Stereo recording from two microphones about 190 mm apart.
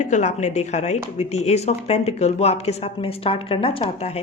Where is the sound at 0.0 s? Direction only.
40° left (ahead or behind).